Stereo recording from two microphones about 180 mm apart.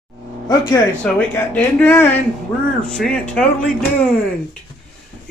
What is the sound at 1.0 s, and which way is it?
Speech, 10° left (ahead or behind).